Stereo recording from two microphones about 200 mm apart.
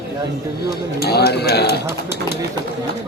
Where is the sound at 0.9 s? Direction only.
55° left (ahead or behind).